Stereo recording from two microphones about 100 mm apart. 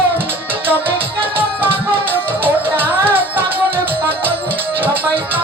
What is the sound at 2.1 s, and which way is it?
Music, 20° right (ahead or behind).